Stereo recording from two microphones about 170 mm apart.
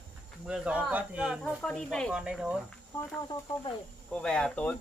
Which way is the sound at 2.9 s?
10° left (ahead or behind).